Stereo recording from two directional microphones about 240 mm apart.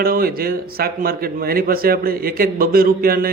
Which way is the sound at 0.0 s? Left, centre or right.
Right.